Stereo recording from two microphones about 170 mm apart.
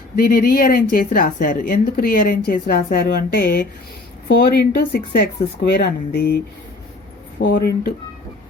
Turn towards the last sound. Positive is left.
turn(degrees=60)  # may be behind; listen again after turning